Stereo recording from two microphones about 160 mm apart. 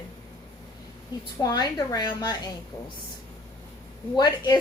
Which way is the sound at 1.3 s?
25° left (ahead or behind).